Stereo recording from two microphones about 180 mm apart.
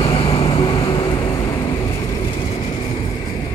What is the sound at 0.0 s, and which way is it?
Vehicle, 30° left (ahead or behind).